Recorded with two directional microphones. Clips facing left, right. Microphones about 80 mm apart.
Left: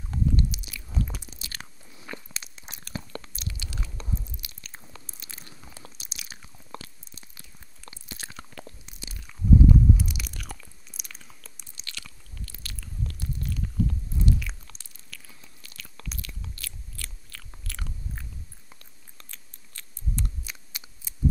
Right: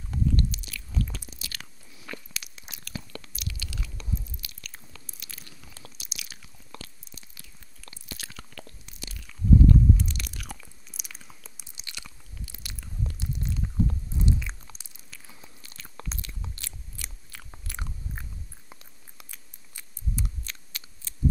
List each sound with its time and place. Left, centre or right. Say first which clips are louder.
0.1 s biting: even; centre
5.9 s chewing: even; left
9.9 s biting: left 1 dB; centre
11.8 s biting: left 1 dB; centre
20.4 s a sound: even; centre